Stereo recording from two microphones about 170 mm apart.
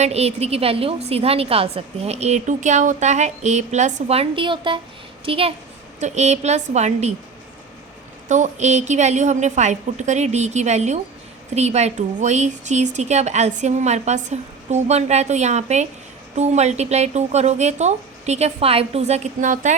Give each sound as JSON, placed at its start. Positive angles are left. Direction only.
{"t": 0.0, "sound": "a woman's voice", "side_deg": -40}
{"t": 8.3, "sound": "a woman's voice", "side_deg": -45}